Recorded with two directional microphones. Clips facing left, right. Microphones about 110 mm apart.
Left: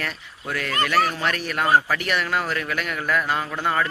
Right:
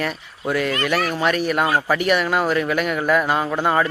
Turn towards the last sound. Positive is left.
turn(degrees=-20)  # may be behind; listen again after turning